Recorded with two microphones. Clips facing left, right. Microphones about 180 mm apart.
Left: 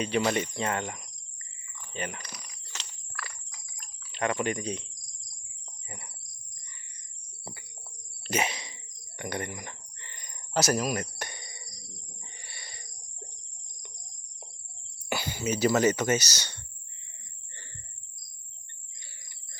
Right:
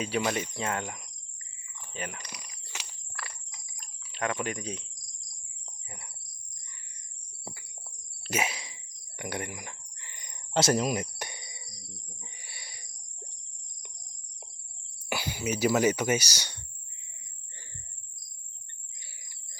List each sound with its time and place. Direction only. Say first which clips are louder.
0.3 s cricket: left 2 dB; 5° right (ahead or behind)
1.9 s speech: left 3 dB; 5° right (ahead or behind)
2.2 s a sound: even; 10° right (ahead or behind)
3.1 s a sound: left 2 dB; 25° right (ahead or behind)
4.1 s speech: left 3 dB; centre (ahead or behind)
8.2 s a sound: left 2 dB; 5° right (ahead or behind)
10.2 s cricket: right 1 dB; 20° right (ahead or behind)
12.2 s owl: left 1 dB; 10° right (ahead or behind)
15.1 s speech: left 1 dB; 10° right (ahead or behind)